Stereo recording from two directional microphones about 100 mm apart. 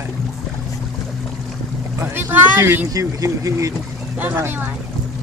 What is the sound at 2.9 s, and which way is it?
Speech, 35° right (ahead or behind).